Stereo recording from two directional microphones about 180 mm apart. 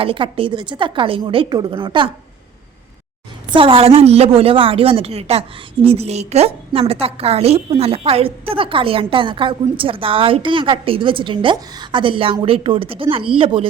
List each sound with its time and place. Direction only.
0.0 s a woman's voice: 30° right (ahead or behind)
3.5 s a woman's voice: 30° right (ahead or behind)